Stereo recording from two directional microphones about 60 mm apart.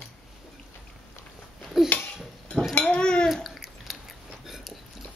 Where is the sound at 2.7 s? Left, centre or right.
Centre.